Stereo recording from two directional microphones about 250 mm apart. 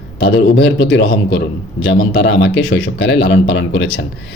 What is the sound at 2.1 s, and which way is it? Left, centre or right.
Speech, left.